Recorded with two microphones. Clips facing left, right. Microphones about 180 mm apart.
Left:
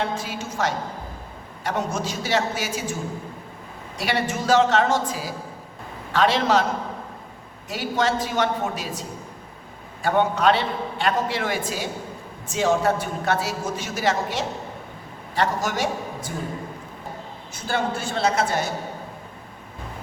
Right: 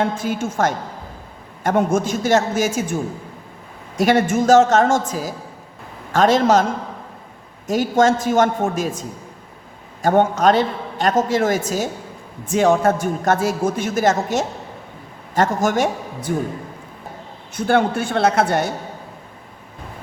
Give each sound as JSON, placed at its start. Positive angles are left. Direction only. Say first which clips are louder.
{"t": 0.2, "sound": "a man's voice", "louder": "right 7 dB", "side_deg": -50}
{"t": 7.7, "sound": "a man's voice", "louder": "right 8 dB", "side_deg": -45}
{"t": 12.5, "sound": "a man's voice", "louder": "right 5 dB", "side_deg": -55}
{"t": 17.5, "sound": "speech", "louder": "right 8 dB", "side_deg": -60}